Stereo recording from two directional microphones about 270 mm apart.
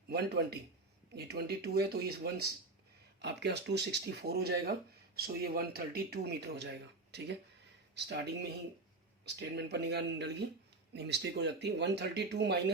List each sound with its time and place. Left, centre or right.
0.1 s a man's voice: right